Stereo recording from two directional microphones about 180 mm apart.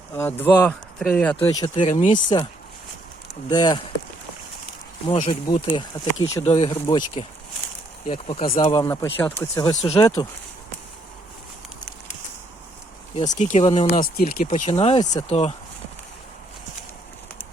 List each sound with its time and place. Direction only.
0.2 s speech: 10° left (ahead or behind)
1.6 s speech: 30° left (ahead or behind)
2.0 s speech: 45° left (ahead or behind)
3.5 s speech: 25° left (ahead or behind)
5.0 s speech: 30° left (ahead or behind)
6.4 s speech: 35° left (ahead or behind)
8.7 s speech: 15° left (ahead or behind)
9.6 s speech: 25° left (ahead or behind)
13.3 s speech: 40° left (ahead or behind)
14.0 s speech: 45° left (ahead or behind)